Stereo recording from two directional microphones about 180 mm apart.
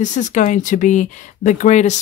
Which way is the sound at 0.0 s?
45° left (ahead or behind).